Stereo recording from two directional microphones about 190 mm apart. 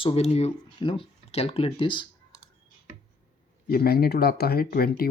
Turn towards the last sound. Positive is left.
turn(degrees=50)  # may be behind; listen again after turning